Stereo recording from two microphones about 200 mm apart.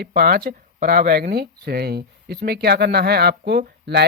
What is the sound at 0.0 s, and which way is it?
Speech, 55° right (ahead or behind).